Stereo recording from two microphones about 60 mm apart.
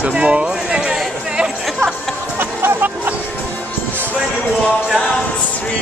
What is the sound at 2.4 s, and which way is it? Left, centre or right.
Music, right.